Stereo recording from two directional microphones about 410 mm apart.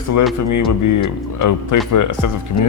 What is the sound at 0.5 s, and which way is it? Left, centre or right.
Speech, left.